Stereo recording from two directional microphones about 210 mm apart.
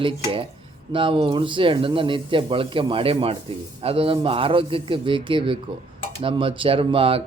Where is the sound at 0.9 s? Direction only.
25° right (ahead or behind).